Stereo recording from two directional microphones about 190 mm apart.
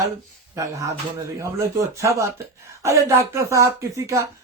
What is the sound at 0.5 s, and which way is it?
Speech, 15° right (ahead or behind).